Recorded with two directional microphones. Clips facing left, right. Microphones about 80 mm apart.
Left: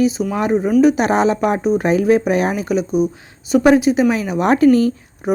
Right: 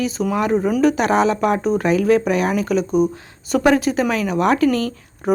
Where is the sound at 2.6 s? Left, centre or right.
Centre.